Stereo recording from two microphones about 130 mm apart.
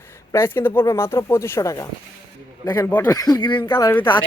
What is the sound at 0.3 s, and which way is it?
Speech, 15° left (ahead or behind).